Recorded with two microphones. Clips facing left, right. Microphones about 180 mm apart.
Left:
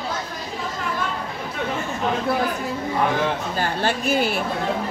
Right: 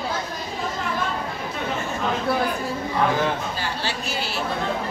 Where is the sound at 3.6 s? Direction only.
50° left (ahead or behind).